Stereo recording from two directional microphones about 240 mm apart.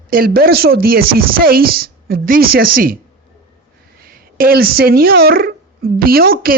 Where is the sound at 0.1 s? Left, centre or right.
Right.